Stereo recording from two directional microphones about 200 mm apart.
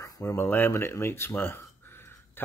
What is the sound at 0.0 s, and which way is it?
Speech, 15° left (ahead or behind).